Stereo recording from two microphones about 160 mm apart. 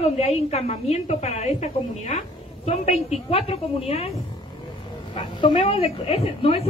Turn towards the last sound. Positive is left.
turn(degrees=35)  # may be behind; listen again after turning